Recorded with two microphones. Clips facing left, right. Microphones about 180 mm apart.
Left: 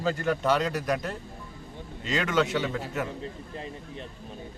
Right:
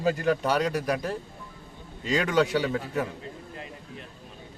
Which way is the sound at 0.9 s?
30° right (ahead or behind).